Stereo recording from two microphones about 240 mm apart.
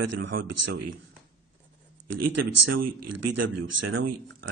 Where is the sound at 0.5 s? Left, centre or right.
Right.